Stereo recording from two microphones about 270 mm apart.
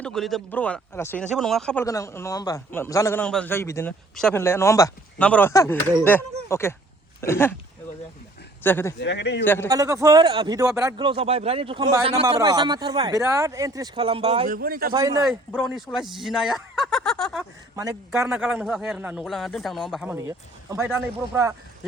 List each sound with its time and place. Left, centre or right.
0.0 s speech: centre
8.6 s speech: centre
9.0 s speech: left
9.4 s speech: centre
9.6 s a man's voice: centre
14.5 s a man's voice: right
14.9 s a man's voice: centre
15.2 s a man's voice: centre